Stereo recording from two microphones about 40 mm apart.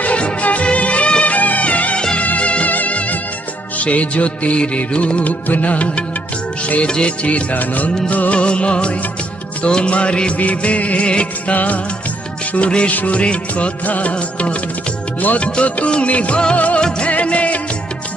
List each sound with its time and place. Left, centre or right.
0.0 s music: left
1.3 s music: left
5.2 s music: left
6.9 s music: left
11.5 s music: left
12.5 s music: left
13.2 s music: left
13.8 s music: left